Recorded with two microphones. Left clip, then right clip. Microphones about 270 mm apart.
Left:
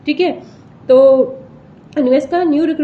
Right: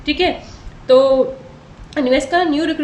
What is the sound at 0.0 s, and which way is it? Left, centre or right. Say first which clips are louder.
A woman's voice: left 1 dB; centre.